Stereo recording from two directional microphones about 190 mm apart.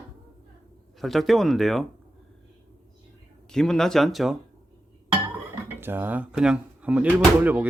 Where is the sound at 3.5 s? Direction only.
Centre (ahead or behind).